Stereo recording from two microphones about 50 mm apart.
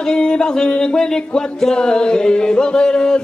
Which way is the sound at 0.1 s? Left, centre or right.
Centre.